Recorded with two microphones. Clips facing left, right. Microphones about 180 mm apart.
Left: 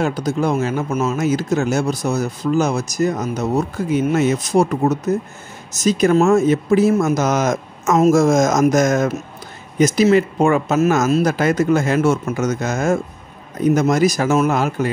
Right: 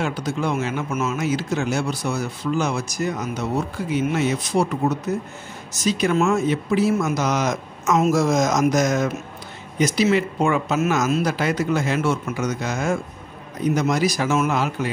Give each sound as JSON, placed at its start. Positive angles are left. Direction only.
{"t": 0.0, "sound": "speech", "side_deg": 40}